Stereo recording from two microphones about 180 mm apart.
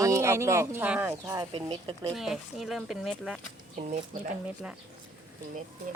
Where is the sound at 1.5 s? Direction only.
25° right (ahead or behind).